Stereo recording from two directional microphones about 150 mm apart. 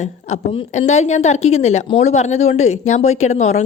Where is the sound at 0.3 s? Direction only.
50° left (ahead or behind).